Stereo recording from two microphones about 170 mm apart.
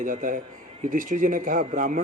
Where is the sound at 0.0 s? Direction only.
50° right (ahead or behind).